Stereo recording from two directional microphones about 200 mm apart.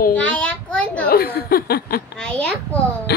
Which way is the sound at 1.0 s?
50° left (ahead or behind).